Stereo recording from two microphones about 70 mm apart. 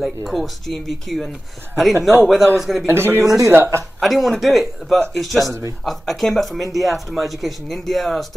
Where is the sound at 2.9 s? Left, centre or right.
Right.